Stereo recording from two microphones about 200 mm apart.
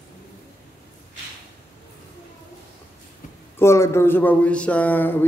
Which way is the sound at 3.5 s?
15° left (ahead or behind).